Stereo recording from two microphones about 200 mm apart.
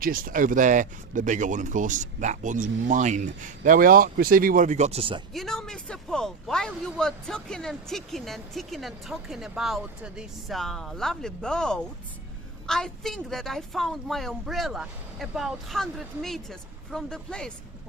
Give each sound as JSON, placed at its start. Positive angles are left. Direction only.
{"t": 0.0, "sound": "speech", "side_deg": -45}
{"t": 5.3, "sound": "speech", "side_deg": 0}